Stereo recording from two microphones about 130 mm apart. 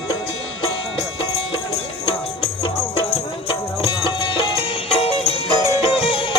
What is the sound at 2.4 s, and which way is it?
Music, 50° left (ahead or behind).